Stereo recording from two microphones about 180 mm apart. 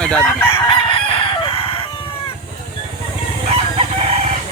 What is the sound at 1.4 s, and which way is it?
Crowing, 30° left (ahead or behind).